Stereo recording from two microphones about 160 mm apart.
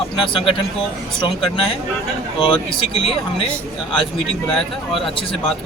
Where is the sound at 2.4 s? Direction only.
30° left (ahead or behind).